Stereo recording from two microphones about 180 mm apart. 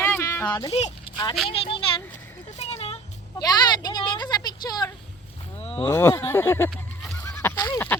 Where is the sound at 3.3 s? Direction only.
25° left (ahead or behind).